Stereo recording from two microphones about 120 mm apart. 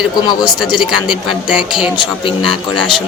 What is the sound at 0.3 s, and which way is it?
Speech, 35° left (ahead or behind).